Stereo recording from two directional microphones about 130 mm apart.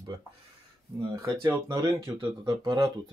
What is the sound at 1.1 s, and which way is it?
Speech, 25° right (ahead or behind).